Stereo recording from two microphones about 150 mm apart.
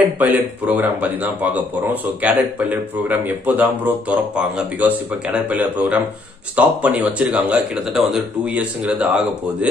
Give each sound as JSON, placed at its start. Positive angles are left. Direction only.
{"t": 0.0, "sound": "speech", "side_deg": -10}